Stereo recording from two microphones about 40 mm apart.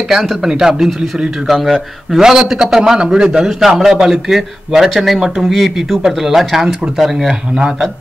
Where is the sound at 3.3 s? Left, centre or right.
Centre.